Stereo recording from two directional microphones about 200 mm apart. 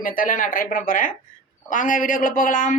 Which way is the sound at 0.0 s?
45° left (ahead or behind).